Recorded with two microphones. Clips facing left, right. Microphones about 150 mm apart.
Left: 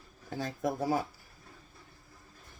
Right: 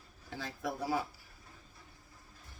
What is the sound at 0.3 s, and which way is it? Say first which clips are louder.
Speech: left 6 dB; 45° left (ahead or behind).